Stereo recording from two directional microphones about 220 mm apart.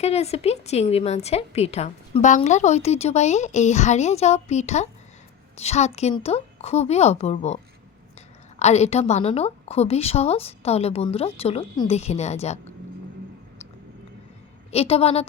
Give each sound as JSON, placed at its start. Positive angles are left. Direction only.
{"t": 0.0, "sound": "a woman's voice", "side_deg": 30}
{"t": 14.7, "sound": "a woman's voice", "side_deg": 25}